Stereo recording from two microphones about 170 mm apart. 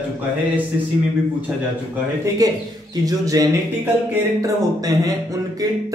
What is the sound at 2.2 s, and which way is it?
Speech, 20° right (ahead or behind).